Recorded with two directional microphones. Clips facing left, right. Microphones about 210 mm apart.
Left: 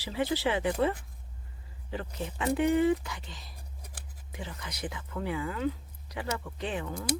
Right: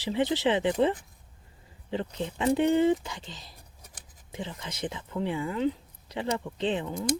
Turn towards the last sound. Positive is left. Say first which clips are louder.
# right 5 dB
turn(degrees=-20)  # may be behind; listen again after turning